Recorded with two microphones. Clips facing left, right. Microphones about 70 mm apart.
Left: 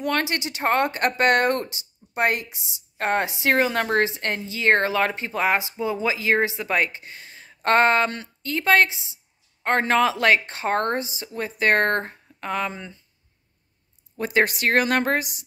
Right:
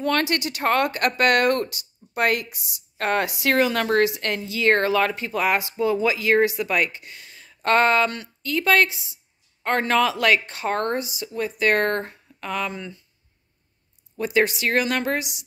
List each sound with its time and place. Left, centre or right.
0.0 s speech: centre
14.1 s speech: left